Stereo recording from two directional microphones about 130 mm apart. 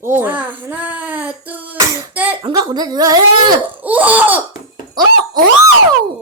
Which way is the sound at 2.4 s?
35° right (ahead or behind).